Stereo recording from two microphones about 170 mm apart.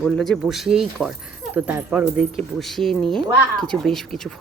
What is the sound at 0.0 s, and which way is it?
Speech, centre (ahead or behind).